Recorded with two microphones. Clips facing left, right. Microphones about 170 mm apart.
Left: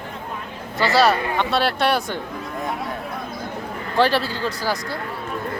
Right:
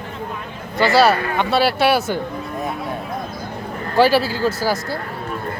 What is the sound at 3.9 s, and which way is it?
Speech, 5° right (ahead or behind).